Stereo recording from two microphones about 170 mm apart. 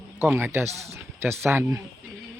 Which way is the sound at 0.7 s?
40° right (ahead or behind).